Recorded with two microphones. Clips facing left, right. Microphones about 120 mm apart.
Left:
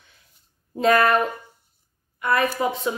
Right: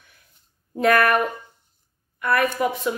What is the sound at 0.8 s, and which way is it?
Speech, 25° left (ahead or behind).